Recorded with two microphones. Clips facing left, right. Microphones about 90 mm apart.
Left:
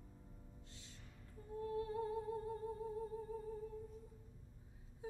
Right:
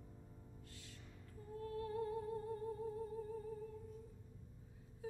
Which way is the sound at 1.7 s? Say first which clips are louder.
Left 1 dB; 20° left (ahead or behind).